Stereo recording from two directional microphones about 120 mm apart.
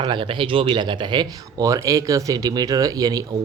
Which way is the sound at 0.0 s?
40° right (ahead or behind).